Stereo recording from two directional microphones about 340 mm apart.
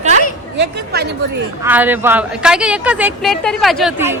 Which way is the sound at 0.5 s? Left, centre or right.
Right.